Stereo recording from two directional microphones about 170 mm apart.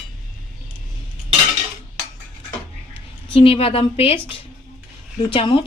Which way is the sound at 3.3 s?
35° left (ahead or behind).